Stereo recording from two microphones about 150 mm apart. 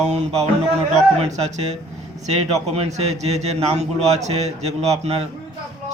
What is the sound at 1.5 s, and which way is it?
A man's voice, 50° right (ahead or behind).